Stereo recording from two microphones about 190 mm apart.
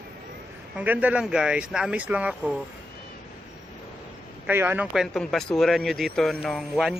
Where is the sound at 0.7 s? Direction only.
10° right (ahead or behind).